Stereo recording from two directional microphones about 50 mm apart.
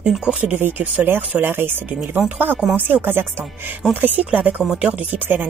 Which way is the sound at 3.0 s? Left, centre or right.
Right.